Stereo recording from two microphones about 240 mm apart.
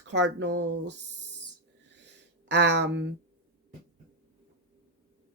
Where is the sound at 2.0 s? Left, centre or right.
Right.